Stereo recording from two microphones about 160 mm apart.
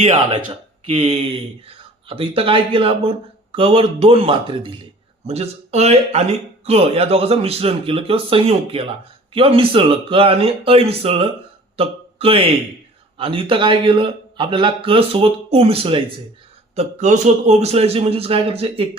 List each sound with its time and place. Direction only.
0.0 s speech: 35° right (ahead or behind)
16.7 s speech: 45° right (ahead or behind)